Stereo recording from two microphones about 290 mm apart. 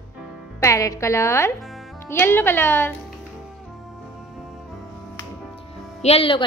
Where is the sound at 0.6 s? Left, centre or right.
Centre.